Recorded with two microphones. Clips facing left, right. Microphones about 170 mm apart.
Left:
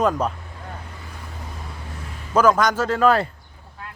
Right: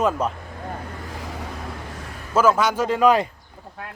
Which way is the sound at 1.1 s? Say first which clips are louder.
Right 6 dB; 90° right.